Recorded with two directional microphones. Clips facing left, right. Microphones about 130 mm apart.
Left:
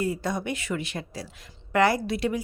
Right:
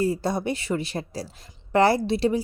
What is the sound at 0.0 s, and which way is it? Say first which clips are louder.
A woman's voice: right 4 dB; 35° right (ahead or behind).